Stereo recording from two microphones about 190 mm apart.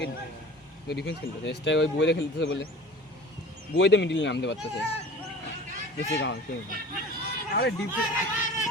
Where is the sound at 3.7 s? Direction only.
70° left (ahead or behind).